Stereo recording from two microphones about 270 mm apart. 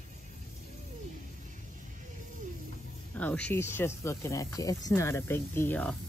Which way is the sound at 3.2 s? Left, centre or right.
Centre.